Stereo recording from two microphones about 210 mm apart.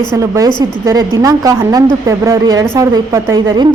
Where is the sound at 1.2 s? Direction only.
15° right (ahead or behind).